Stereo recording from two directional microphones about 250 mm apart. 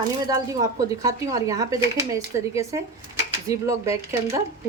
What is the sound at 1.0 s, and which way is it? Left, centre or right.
Speech, centre.